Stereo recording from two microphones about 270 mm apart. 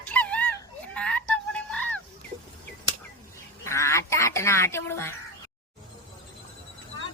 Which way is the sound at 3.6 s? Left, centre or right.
Centre.